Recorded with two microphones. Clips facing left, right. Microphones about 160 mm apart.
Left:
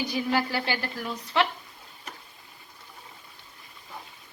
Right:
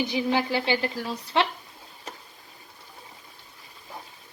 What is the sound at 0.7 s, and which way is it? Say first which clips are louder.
Speech: right 4 dB; 25° right (ahead or behind).